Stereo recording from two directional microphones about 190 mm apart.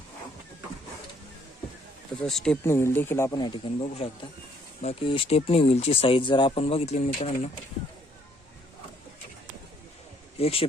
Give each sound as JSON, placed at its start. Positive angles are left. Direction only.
{"t": 2.2, "sound": "speech", "side_deg": 5}
{"t": 10.3, "sound": "speech", "side_deg": 30}